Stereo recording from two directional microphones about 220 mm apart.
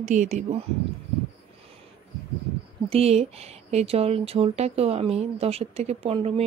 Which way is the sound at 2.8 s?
25° right (ahead or behind).